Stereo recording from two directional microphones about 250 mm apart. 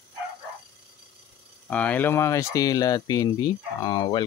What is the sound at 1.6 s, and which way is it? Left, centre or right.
Speech, centre.